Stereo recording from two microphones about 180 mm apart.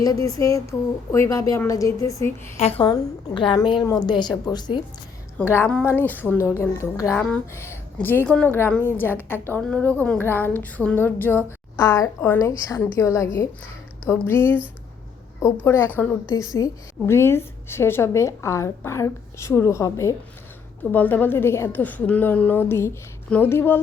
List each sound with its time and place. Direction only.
0.0 s a woman's voice: 20° left (ahead or behind)
2.6 s a woman's voice: 30° left (ahead or behind)
5.4 s a woman's voice: 10° left (ahead or behind)
7.2 s a woman's voice: 5° left (ahead or behind)